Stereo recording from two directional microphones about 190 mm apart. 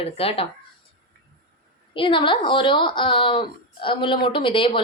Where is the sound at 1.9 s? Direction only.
25° left (ahead or behind).